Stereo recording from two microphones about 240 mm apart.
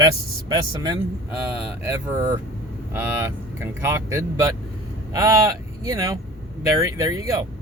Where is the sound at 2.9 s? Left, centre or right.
Centre.